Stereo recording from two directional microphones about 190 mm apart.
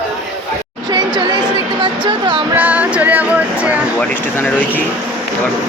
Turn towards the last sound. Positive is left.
turn(degrees=10)  # may be behind; listen again after turning